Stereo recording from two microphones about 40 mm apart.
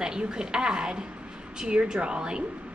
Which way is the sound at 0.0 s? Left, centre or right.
Right.